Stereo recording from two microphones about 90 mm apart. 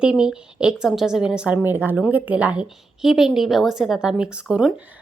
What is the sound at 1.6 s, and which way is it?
A woman's voice, 20° right (ahead or behind).